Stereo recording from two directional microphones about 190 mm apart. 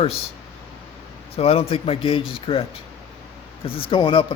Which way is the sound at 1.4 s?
30° left (ahead or behind).